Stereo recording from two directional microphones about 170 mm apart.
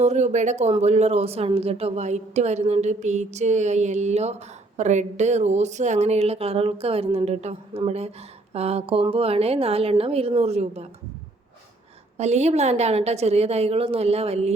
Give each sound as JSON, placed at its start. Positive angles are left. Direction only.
{"t": 0.0, "sound": "speech", "side_deg": -40}
{"t": 12.1, "sound": "speech", "side_deg": -40}